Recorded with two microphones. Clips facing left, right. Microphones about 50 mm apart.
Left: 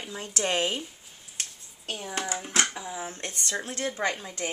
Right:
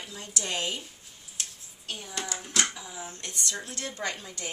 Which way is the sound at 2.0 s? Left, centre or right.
Left.